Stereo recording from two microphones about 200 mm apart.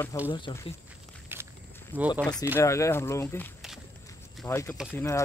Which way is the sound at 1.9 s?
10° right (ahead or behind).